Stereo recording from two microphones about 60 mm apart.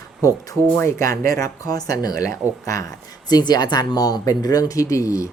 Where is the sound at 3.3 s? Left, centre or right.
Left.